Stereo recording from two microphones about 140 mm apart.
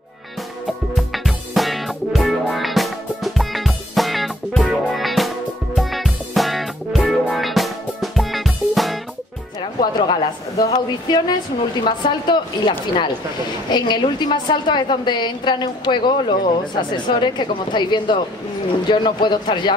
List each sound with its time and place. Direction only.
0.9 s music: centre (ahead or behind)
9.6 s music: 35° left (ahead or behind)
10.7 s a woman's voice: 30° left (ahead or behind)